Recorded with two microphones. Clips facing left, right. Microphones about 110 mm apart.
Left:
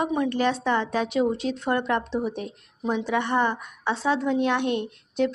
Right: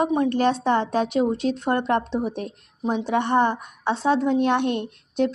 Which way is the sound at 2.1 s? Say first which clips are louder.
Right 2 dB; 20° right (ahead or behind).